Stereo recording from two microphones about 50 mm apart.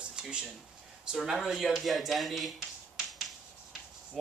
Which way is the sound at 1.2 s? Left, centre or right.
Centre.